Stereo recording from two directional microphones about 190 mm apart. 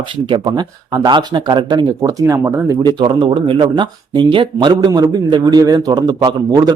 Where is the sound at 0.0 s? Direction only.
25° right (ahead or behind).